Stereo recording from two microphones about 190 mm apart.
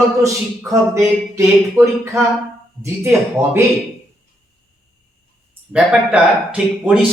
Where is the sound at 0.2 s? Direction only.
15° right (ahead or behind).